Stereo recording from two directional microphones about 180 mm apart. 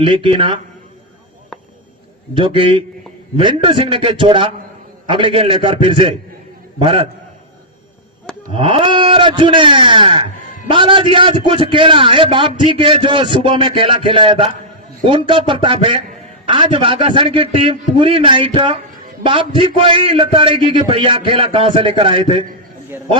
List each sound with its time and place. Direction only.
0.0 s a man's voice: 30° right (ahead or behind)
2.3 s a man's voice: 30° right (ahead or behind)
8.5 s a man's voice: 30° right (ahead or behind)